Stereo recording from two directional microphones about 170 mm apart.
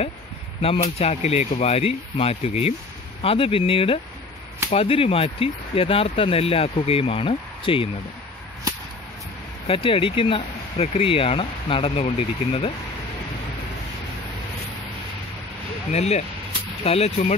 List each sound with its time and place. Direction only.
0.6 s speech: 35° left (ahead or behind)
9.7 s speech: 35° left (ahead or behind)
15.9 s speech: 40° left (ahead or behind)